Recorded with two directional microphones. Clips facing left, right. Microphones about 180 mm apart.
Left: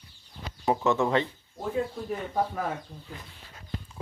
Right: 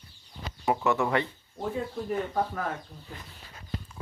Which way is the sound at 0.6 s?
20° left (ahead or behind).